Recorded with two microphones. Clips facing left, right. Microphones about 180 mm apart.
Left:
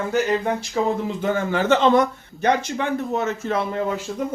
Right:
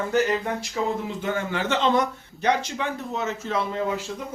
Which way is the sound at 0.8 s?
50° left (ahead or behind).